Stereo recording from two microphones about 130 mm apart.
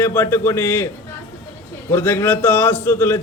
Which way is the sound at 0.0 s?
15° left (ahead or behind).